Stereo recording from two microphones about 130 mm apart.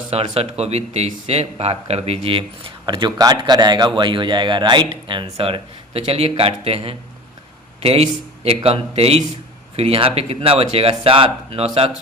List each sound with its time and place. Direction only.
0.1 s speech: 55° right (ahead or behind)